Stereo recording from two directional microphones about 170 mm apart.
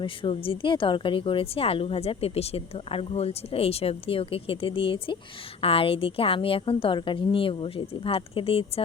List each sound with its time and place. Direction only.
0.0 s a woman's voice: 30° left (ahead or behind)